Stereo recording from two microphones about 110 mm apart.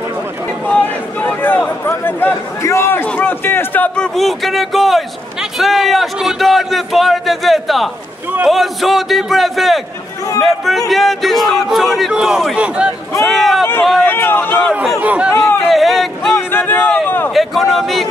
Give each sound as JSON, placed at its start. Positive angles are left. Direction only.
{"t": 0.7, "sound": "a sound", "side_deg": 15}
{"t": 3.1, "sound": "a man's voice", "side_deg": 15}
{"t": 13.2, "sound": "a man's voice", "side_deg": 0}
{"t": 14.0, "sound": "speech", "side_deg": 20}
{"t": 14.7, "sound": "speech", "side_deg": -10}
{"t": 15.3, "sound": "speech", "side_deg": 25}
{"t": 15.7, "sound": "speech", "side_deg": 0}
{"t": 16.3, "sound": "a sound", "side_deg": 20}
{"t": 17.3, "sound": "speech", "side_deg": 0}